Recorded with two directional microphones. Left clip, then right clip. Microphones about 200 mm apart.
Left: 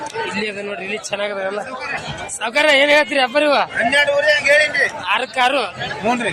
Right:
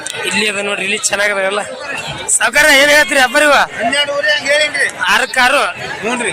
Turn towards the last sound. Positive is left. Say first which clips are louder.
# right 1 dB
turn(degrees=50)  # may be behind; listen again after turning